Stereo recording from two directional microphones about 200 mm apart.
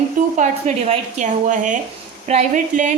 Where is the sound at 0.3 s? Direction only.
35° right (ahead or behind).